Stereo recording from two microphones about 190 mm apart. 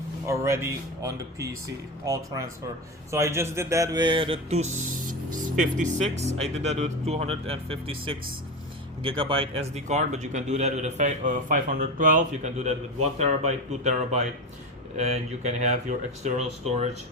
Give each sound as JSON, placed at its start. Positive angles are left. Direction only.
{"t": 0.3, "sound": "speech", "side_deg": -15}
{"t": 4.7, "sound": "a man's voice", "side_deg": -45}